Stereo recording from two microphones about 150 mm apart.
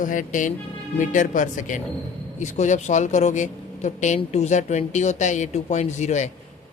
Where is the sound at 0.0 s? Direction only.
60° left (ahead or behind).